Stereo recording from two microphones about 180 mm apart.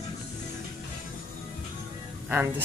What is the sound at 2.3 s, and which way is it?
Speech, 10° right (ahead or behind).